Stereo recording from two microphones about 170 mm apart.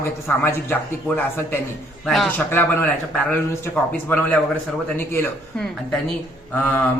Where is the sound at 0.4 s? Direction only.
10° left (ahead or behind).